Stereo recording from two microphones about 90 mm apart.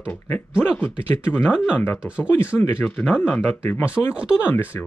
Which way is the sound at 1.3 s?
10° right (ahead or behind).